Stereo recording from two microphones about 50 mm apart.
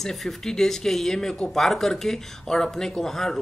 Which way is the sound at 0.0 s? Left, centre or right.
Centre.